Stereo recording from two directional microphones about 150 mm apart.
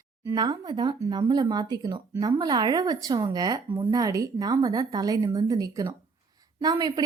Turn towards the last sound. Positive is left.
turn(degrees=-25)  # may be behind; listen again after turning